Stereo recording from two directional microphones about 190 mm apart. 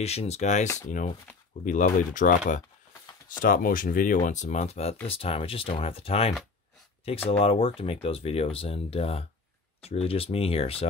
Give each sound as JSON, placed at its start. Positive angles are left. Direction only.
{"t": 0.0, "sound": "speech", "side_deg": 35}